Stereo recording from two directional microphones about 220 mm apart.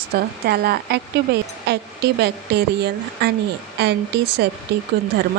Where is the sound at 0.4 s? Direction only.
45° right (ahead or behind).